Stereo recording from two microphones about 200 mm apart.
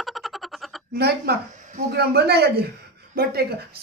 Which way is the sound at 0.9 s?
55° right (ahead or behind).